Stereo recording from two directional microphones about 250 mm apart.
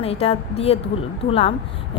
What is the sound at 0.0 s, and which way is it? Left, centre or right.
Speech, left.